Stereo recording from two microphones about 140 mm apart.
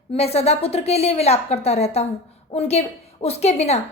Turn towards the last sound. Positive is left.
turn(degrees=50)  # may be behind; listen again after turning